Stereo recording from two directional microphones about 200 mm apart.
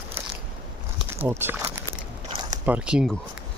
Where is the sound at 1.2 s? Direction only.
10° right (ahead or behind).